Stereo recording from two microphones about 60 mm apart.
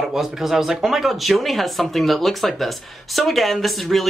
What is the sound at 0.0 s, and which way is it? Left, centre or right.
Speech, centre.